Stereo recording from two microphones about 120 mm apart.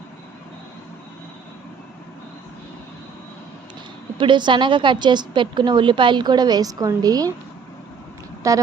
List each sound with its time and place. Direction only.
4.2 s a woman's voice: 40° right (ahead or behind)
8.4 s speech: 25° right (ahead or behind)